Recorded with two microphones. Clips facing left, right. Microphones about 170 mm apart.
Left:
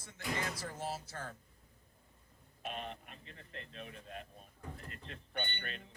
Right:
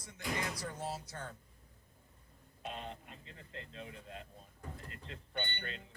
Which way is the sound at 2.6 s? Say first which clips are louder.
Left 1 dB; 20° right (ahead or behind).